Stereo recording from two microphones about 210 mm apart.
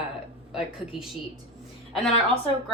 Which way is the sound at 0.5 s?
Centre (ahead or behind).